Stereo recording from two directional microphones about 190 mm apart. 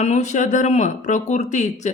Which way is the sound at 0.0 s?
40° left (ahead or behind).